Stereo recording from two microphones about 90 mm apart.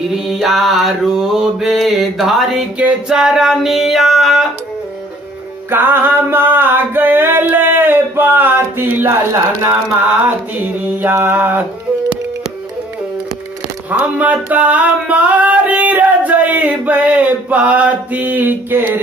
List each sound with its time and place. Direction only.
0.1 s mantra: 5° right (ahead or behind)
2.8 s mantra: 10° right (ahead or behind)
5.7 s music: 25° right (ahead or behind)
11.0 s music: 25° right (ahead or behind)
13.8 s music: 15° right (ahead or behind)